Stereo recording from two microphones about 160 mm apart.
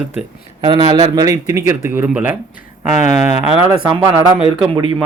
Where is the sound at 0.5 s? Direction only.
30° right (ahead or behind); by 2.3 s 10° right (ahead or behind).